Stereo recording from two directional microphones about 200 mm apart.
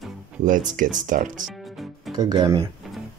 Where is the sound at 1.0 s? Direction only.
40° right (ahead or behind).